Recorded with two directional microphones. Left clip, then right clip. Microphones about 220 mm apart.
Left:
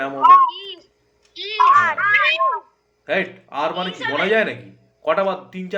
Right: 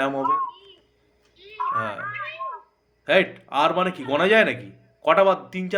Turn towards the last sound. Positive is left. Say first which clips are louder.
# right 3 dB
turn(degrees=-25)  # may be behind; listen again after turning